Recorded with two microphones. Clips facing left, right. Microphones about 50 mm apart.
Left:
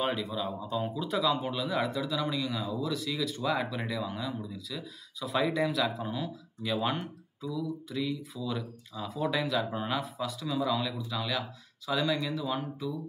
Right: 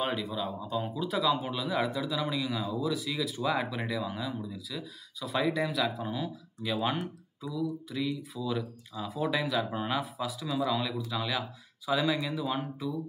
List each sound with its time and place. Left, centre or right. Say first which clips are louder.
0.0 s speech: left 1 dB; centre